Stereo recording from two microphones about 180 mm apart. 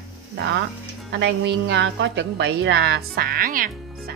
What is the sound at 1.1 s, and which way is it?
A woman's voice, 80° right.